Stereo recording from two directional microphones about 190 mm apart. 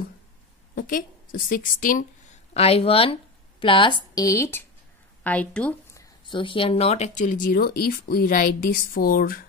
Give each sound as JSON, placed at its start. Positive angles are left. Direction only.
{"t": 0.7, "sound": "speech", "side_deg": 50}
{"t": 2.5, "sound": "a woman's voice", "side_deg": 30}
{"t": 6.2, "sound": "speech", "side_deg": 25}